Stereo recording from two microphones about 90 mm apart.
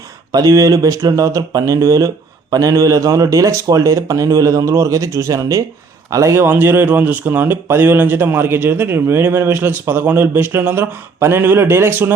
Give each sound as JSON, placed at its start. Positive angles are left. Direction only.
{"t": 0.3, "sound": "a man's voice", "side_deg": -40}